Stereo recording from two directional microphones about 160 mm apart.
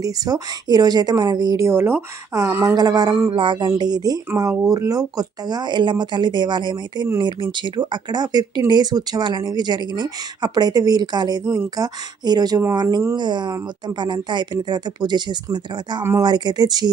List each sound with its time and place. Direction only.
0.0 s a woman's voice: 25° right (ahead or behind)